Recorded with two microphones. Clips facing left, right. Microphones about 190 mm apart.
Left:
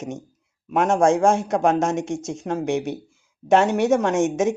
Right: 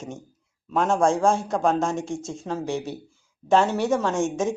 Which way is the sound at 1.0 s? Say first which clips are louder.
Left 4 dB; 20° left (ahead or behind).